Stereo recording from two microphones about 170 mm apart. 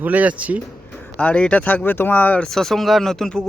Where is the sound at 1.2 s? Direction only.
5° left (ahead or behind).